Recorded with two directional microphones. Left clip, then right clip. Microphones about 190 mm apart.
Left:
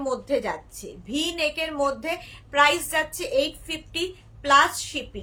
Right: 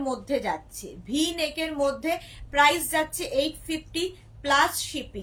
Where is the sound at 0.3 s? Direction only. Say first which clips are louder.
Left 1 dB; 15° left (ahead or behind).